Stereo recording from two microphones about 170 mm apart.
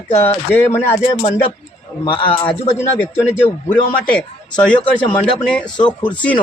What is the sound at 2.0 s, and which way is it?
Speech, 30° left (ahead or behind).